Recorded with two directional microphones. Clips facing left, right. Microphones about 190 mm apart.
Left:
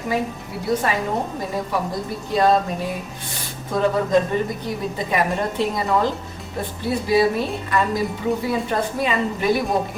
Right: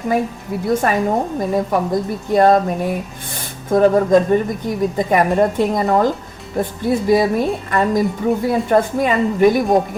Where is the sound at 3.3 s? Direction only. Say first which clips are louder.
Right 8 dB; 50° right (ahead or behind).